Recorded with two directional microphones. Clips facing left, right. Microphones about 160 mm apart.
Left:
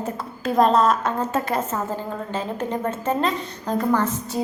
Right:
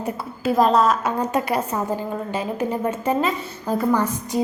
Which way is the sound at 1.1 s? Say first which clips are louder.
Right 2 dB; 15° right (ahead or behind).